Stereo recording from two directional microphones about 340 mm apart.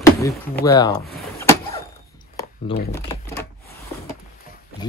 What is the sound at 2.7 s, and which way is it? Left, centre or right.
Speech, centre.